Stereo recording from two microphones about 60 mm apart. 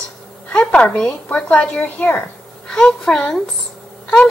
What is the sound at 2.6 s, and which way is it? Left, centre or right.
Speech, centre.